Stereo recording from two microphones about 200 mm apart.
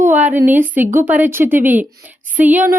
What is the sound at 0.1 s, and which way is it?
Speech, 10° right (ahead or behind).